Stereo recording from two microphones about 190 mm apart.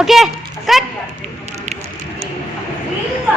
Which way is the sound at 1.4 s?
35° right (ahead or behind).